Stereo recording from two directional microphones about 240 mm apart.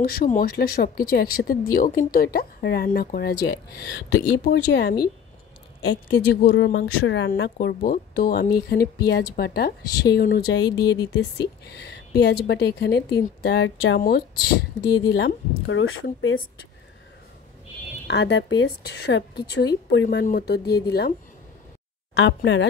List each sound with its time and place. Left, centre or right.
0.0 s a woman's voice: left
18.0 s a woman's voice: left
22.1 s a woman's voice: left